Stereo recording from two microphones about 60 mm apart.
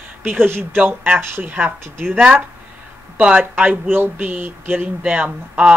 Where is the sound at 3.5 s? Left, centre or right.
Right.